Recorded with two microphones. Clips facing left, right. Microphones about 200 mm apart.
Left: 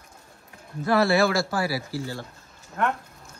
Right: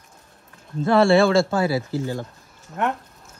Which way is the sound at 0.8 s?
25° right (ahead or behind).